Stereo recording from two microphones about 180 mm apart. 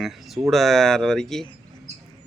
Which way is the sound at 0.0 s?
Centre (ahead or behind).